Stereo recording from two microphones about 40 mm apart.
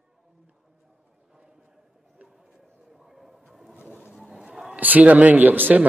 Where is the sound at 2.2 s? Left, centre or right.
Centre.